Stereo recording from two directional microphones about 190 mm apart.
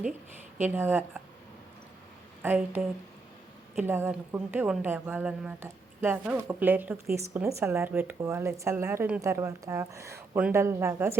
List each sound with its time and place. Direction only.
0.6 s speech: 10° right (ahead or behind)
2.4 s speech: 10° right (ahead or behind)